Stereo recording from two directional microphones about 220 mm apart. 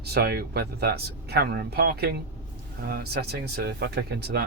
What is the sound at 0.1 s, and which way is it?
Speech, 45° right (ahead or behind).